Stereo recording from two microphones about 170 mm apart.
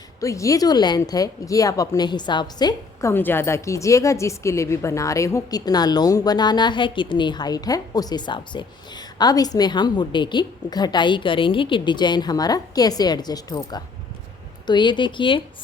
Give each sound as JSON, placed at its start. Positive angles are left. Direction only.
{"t": 0.2, "sound": "speech", "side_deg": 20}